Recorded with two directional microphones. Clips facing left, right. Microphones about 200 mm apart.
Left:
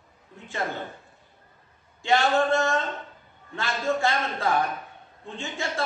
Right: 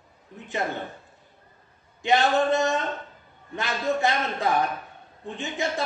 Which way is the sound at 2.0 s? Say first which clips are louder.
Right 1 dB; 20° right (ahead or behind).